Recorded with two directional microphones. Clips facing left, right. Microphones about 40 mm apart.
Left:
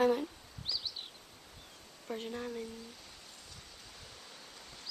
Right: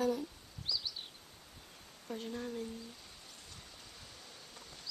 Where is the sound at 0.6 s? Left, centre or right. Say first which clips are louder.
Even; centre.